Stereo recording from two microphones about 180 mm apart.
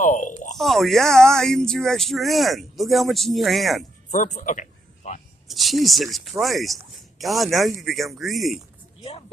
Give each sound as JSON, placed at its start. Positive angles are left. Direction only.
{"t": 0.0, "sound": "speech", "side_deg": 45}
{"t": 0.6, "sound": "speech", "side_deg": 0}
{"t": 4.1, "sound": "a sound", "side_deg": 45}
{"t": 5.5, "sound": "speech", "side_deg": 0}